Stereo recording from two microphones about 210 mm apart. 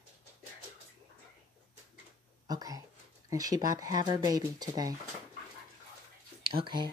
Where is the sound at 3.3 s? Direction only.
15° right (ahead or behind).